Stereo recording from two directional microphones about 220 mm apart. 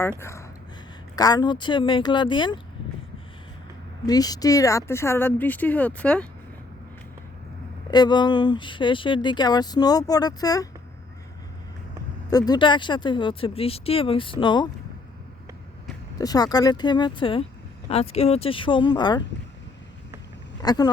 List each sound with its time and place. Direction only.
0.2 s speech: 10° left (ahead or behind)
4.0 s speech: 15° left (ahead or behind)
7.9 s speech: 20° left (ahead or behind)
12.3 s speech: 20° left (ahead or behind)
16.1 s speech: 15° left (ahead or behind)
20.6 s speech: 20° left (ahead or behind)